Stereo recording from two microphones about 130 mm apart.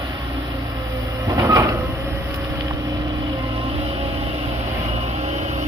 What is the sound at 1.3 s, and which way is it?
Vehicle, 25° right (ahead or behind).